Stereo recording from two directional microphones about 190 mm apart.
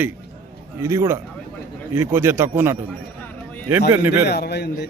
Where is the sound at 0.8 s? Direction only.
15° right (ahead or behind).